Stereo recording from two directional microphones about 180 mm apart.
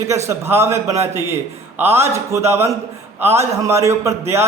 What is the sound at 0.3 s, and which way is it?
A man's voice, 15° right (ahead or behind).